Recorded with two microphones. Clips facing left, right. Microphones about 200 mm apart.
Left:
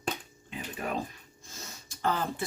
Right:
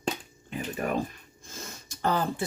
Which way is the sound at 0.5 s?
50° right (ahead or behind).